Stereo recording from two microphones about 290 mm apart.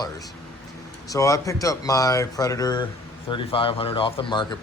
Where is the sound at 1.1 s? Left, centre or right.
Centre.